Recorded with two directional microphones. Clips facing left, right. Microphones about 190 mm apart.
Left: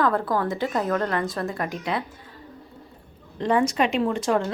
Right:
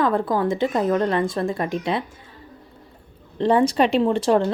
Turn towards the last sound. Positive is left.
turn(degrees=-30)  # may be behind; listen again after turning